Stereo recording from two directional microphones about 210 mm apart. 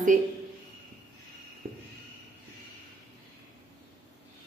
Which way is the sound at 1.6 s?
45° right (ahead or behind).